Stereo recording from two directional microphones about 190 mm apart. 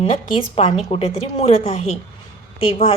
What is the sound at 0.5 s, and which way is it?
A woman's voice, 30° left (ahead or behind).